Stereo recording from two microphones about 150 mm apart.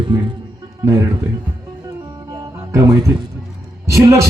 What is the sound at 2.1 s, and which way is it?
Music, 25° right (ahead or behind).